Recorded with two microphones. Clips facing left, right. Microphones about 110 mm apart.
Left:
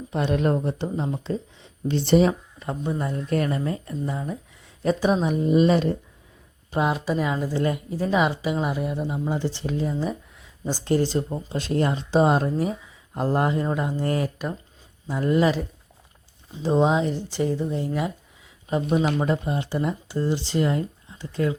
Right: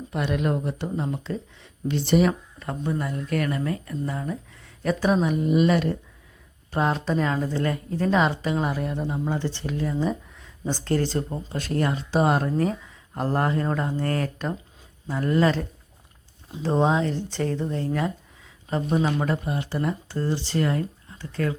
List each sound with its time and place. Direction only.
0.1 s speech: 25° left (ahead or behind)
0.3 s speech: 35° left (ahead or behind)
2.6 s speech: 20° left (ahead or behind)
6.7 s speech: 10° left (ahead or behind)
9.9 s speech: 5° left (ahead or behind)
11.2 s speech: 5° left (ahead or behind)
11.5 s speech: 20° left (ahead or behind)
16.6 s speech: 15° left (ahead or behind)